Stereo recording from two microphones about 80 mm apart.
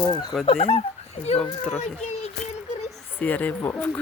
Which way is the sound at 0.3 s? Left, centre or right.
Centre.